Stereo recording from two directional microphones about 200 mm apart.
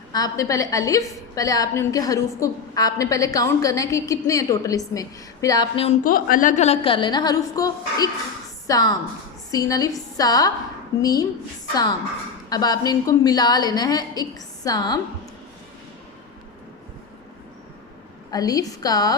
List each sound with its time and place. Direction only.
0.1 s a woman's voice: 15° left (ahead or behind)
6.0 s a woman's voice: 45° left (ahead or behind); by 15.0 s 20° left (ahead or behind)
18.3 s a woman's voice: 20° left (ahead or behind)